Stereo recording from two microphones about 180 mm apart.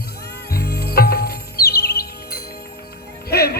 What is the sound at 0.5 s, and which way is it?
Music, 60° left (ahead or behind).